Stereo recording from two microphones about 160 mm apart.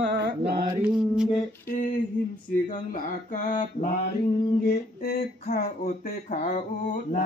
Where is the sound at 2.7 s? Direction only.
55° left (ahead or behind).